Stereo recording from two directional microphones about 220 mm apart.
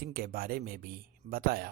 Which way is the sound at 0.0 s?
40° right (ahead or behind).